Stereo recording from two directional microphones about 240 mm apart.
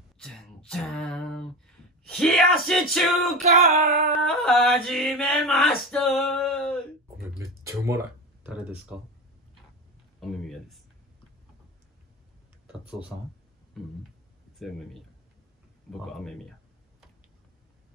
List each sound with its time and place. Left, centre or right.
0.2 s a sound: centre
2.0 s chant: centre
3.4 s female singing: right
4.1 s chant: centre
7.3 s a sound: centre
8.5 s speech: centre
10.2 s speech: centre
12.6 s a sound: centre
14.6 s chant: centre
16.1 s chant: centre